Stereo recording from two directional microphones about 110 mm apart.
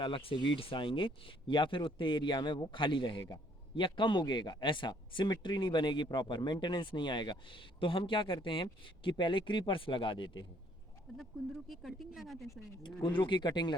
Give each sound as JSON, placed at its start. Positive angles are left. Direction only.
{"t": 0.0, "sound": "speech", "side_deg": 50}
{"t": 11.3, "sound": "speech", "side_deg": 0}
{"t": 12.8, "sound": "speech", "side_deg": 45}